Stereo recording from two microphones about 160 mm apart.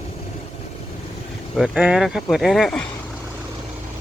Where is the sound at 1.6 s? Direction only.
5° right (ahead or behind).